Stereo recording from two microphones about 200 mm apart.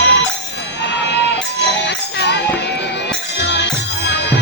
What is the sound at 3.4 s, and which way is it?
Music, 60° left (ahead or behind).